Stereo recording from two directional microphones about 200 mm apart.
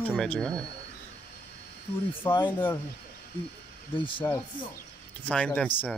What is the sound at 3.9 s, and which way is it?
Speech, 25° left (ahead or behind).